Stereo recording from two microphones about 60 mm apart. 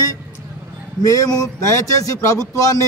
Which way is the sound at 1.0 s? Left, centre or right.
Left.